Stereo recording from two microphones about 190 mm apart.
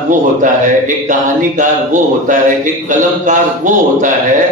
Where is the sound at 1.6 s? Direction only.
40° right (ahead or behind).